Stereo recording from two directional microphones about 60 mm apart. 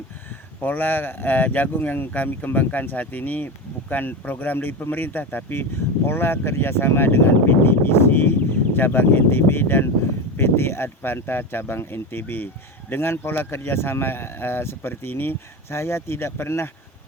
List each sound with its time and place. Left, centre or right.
0.6 s speech: left
15.8 s speech: left